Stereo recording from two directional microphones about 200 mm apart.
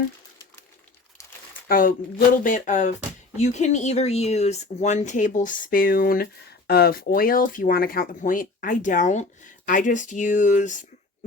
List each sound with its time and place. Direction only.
1.2 s crumpling: 15° left (ahead or behind)
1.6 s speech: 45° left (ahead or behind)